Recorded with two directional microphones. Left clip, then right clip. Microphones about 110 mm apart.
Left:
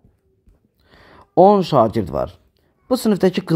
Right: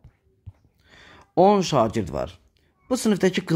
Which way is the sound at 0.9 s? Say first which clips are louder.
Left 6 dB; 15° left (ahead or behind).